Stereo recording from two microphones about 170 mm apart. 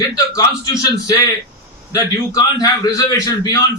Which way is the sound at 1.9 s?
20° left (ahead or behind).